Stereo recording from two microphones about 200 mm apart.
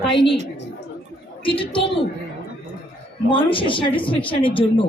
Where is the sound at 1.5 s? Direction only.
25° left (ahead or behind).